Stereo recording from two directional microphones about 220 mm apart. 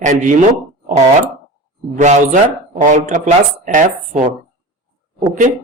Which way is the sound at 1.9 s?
35° right (ahead or behind).